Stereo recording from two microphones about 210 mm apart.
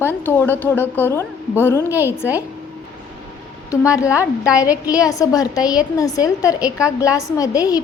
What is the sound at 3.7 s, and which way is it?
A woman's voice, 15° left (ahead or behind).